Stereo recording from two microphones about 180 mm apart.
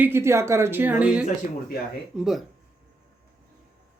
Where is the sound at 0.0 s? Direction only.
15° right (ahead or behind).